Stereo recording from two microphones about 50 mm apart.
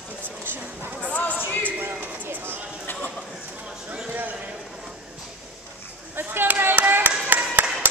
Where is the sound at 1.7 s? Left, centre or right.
Right.